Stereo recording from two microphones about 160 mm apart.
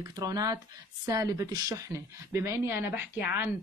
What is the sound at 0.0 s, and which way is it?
A woman's voice, 25° right (ahead or behind).